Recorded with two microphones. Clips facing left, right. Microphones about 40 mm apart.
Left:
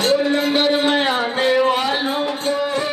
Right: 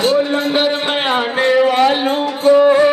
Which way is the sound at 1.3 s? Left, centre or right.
Right.